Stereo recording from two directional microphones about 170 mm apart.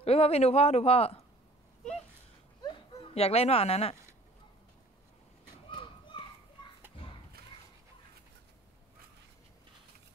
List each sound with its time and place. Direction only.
0.0 s a man's voice: 35° left (ahead or behind)
2.6 s dog: 30° left (ahead or behind)
5.7 s children playing: 30° left (ahead or behind)